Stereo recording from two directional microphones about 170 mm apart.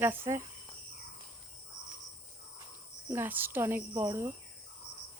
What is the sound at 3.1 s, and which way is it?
Speech, 10° right (ahead or behind).